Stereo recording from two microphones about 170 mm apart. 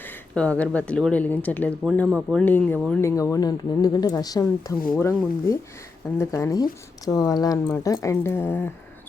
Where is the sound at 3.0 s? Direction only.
20° left (ahead or behind).